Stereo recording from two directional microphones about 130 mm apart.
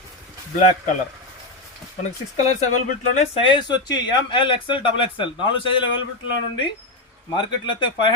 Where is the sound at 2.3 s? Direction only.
60° left (ahead or behind).